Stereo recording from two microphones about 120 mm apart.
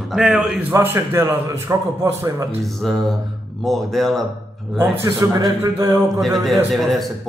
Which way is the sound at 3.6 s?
Centre (ahead or behind).